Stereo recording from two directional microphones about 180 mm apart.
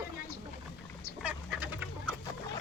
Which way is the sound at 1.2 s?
10° right (ahead or behind).